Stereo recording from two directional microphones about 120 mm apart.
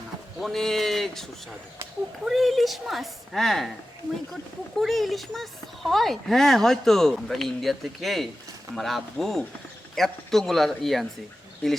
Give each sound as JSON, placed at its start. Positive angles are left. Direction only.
{"t": 0.3, "sound": "speech", "side_deg": 0}
{"t": 4.8, "sound": "speech", "side_deg": 0}